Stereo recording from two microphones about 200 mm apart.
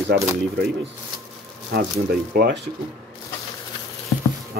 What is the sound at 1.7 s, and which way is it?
Speech, 50° right (ahead or behind).